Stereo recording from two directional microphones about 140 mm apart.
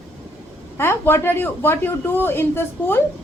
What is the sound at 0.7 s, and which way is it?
A woman's voice, 15° left (ahead or behind).